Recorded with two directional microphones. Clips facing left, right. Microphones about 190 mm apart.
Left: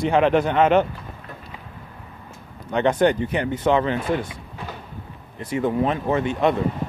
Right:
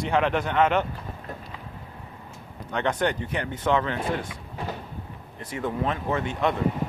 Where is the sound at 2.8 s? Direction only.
25° left (ahead or behind).